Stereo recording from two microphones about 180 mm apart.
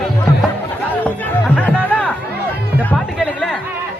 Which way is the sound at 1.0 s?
10° left (ahead or behind).